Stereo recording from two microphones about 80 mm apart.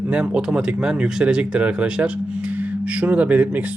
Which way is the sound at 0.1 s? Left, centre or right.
Centre.